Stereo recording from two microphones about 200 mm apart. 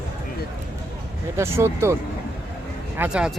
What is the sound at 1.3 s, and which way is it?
Speech, 15° right (ahead or behind).